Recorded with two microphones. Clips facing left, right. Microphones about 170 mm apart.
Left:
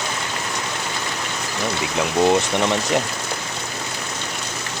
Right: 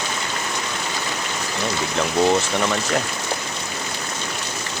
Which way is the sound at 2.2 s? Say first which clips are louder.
Left 2 dB; 20° left (ahead or behind).